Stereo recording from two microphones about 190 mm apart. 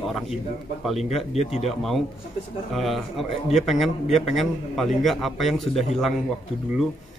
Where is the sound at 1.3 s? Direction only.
35° left (ahead or behind).